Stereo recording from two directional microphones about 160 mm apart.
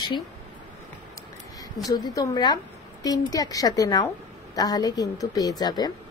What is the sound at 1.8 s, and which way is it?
Speech, 25° left (ahead or behind).